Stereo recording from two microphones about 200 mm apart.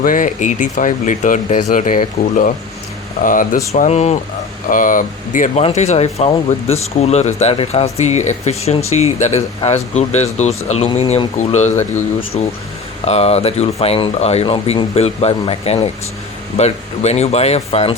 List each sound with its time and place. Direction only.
0.0 s speech: 45° left (ahead or behind)